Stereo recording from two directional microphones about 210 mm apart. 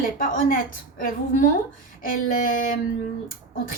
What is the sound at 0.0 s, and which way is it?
Speech, 40° left (ahead or behind).